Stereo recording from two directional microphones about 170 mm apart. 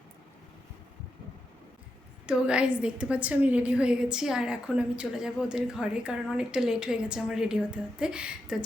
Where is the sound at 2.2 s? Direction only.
5° right (ahead or behind).